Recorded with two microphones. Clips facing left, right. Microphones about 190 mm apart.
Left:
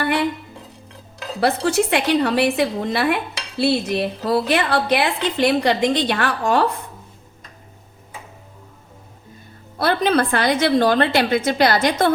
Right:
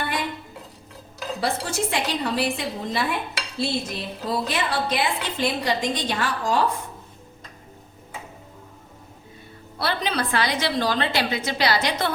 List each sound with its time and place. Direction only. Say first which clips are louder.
1.4 s a woman's voice: left 8 dB; 65° left (ahead or behind)
9.7 s a woman's voice: left 8 dB; 50° left (ahead or behind)